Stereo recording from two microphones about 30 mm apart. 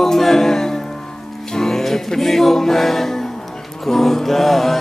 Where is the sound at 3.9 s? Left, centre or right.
Centre.